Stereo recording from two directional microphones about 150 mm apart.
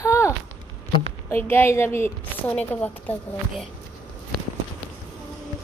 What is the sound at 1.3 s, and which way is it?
A woman's voice, 15° left (ahead or behind).